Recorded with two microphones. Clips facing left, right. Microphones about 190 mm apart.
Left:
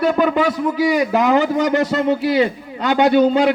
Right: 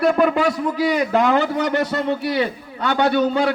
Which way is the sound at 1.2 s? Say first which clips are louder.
Left 3 dB; 20° left (ahead or behind).